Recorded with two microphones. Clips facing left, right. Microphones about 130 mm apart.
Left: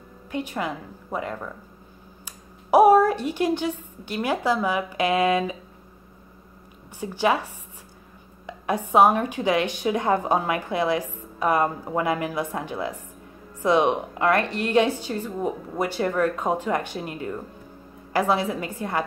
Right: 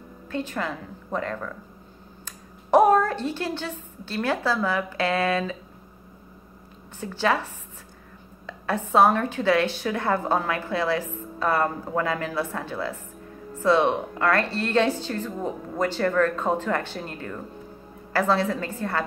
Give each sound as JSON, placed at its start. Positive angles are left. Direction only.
{"t": 0.3, "sound": "a woman's voice", "side_deg": 15}
{"t": 7.0, "sound": "a woman's voice", "side_deg": 15}